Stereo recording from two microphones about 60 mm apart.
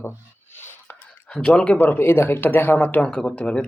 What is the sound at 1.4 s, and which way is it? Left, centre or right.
Speech, centre.